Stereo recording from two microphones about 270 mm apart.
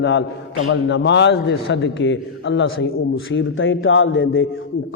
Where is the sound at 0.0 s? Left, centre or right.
Left.